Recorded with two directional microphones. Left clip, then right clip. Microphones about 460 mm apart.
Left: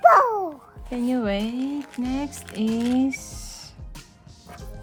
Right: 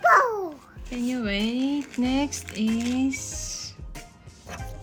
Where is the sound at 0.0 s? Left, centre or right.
Centre.